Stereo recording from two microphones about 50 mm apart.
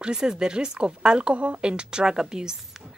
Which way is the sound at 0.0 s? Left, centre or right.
Centre.